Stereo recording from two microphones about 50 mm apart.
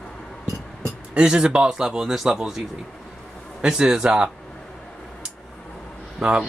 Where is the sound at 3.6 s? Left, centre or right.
Centre.